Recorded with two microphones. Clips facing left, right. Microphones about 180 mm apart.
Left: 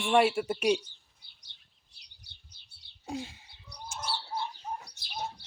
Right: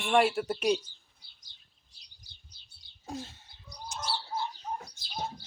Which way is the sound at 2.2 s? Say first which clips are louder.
Left 1 dB; 65° left (ahead or behind).